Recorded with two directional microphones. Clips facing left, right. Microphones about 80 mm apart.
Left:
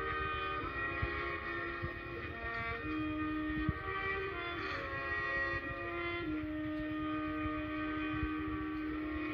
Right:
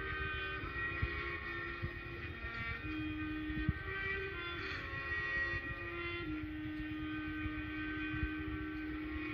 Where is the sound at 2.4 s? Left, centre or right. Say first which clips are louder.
Left 5 dB; left.